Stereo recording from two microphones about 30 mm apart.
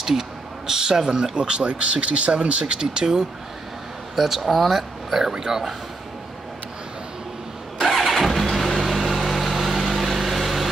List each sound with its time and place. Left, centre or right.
0.7 s speech: centre
1.3 s speech: right
2.6 s speech: right
4.1 s speech: centre
4.4 s speech: centre
4.6 s speech: centre
7.9 s vehicle: centre